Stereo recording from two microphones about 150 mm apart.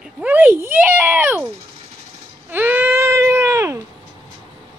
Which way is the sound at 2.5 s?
15° right (ahead or behind).